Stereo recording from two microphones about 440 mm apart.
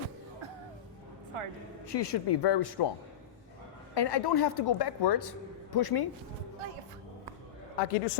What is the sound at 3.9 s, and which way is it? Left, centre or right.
A woman's voice, left.